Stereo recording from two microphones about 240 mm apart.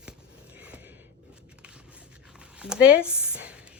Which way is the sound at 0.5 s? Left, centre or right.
Centre.